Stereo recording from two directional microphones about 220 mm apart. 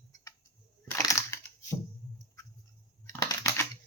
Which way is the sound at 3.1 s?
15° left (ahead or behind).